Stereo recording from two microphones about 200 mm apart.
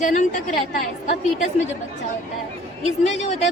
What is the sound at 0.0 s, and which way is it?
Speech, 40° left (ahead or behind).